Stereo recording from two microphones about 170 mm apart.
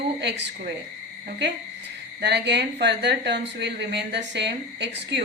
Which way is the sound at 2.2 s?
80° right.